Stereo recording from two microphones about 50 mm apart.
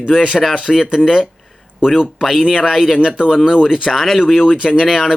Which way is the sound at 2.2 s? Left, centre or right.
Centre.